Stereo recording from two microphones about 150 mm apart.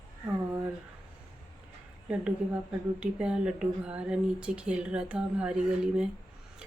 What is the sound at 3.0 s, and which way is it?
Speech, 5° right (ahead or behind).